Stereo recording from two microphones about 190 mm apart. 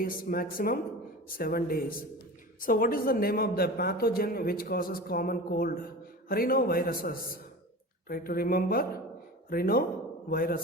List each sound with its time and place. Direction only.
0.0 s a man's voice: 50° left (ahead or behind)